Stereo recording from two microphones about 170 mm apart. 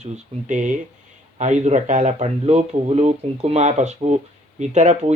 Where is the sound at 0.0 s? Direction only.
45° right (ahead or behind).